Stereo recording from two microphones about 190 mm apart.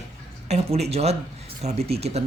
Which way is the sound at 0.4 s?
35° right (ahead or behind).